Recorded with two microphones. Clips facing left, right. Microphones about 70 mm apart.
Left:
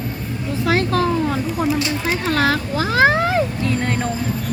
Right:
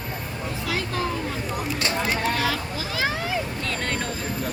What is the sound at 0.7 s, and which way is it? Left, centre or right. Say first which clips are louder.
Vehicle: left 10 dB; left.